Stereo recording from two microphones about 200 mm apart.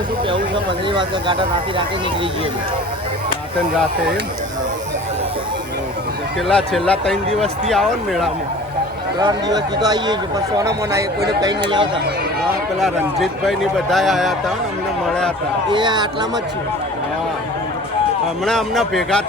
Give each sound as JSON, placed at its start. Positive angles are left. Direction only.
{"t": 0.3, "sound": "speech", "side_deg": -25}
{"t": 6.5, "sound": "speech", "side_deg": 5}
{"t": 9.1, "sound": "speech", "side_deg": -20}
{"t": 12.8, "sound": "speech", "side_deg": 0}
{"t": 15.7, "sound": "speech", "side_deg": -20}
{"t": 18.4, "sound": "speech", "side_deg": 0}